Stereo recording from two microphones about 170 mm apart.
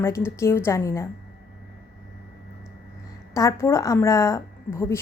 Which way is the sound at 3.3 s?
20° left (ahead or behind).